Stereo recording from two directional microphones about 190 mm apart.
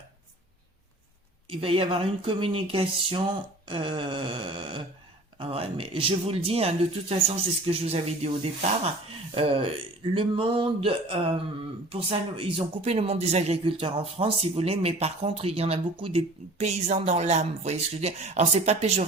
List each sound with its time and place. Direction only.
1.5 s speech: 30° right (ahead or behind)